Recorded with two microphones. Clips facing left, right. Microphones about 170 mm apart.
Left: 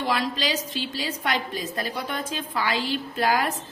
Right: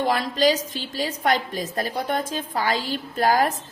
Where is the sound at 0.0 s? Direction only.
45° right (ahead or behind).